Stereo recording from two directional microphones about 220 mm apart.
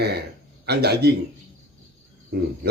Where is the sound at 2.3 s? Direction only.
50° right (ahead or behind).